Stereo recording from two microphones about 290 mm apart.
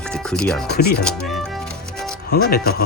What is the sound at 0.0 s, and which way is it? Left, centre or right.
Chopping, centre.